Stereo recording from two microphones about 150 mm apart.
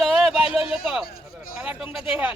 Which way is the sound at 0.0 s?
Centre (ahead or behind).